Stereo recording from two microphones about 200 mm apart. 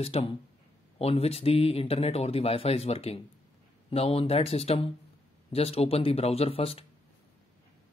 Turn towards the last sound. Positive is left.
turn(degrees=30)  # may be behind; listen again after turning